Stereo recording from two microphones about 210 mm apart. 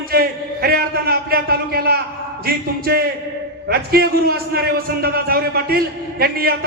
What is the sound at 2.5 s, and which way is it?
A man's voice, 45° right (ahead or behind).